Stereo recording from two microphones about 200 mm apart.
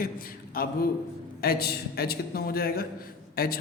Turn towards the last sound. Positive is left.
turn(degrees=50)  # may be behind; listen again after turning